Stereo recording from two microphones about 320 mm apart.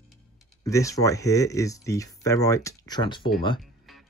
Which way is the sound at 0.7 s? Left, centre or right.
Centre.